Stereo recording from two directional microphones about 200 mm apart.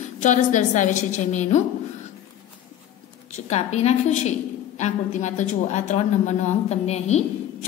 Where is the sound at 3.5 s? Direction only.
30° left (ahead or behind).